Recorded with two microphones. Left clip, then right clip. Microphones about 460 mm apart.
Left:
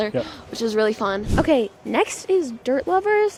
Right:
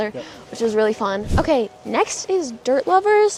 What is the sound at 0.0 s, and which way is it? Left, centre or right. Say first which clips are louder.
A woman's voice: left 2 dB; centre.